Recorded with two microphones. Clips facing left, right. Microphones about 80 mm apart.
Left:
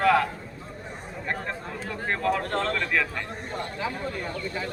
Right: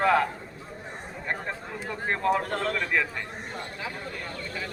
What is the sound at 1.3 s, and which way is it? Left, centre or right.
Speech, centre.